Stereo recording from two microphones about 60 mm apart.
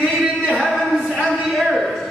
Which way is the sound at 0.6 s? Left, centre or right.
Centre.